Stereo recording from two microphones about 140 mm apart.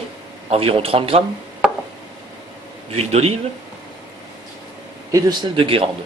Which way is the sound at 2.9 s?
50° right (ahead or behind).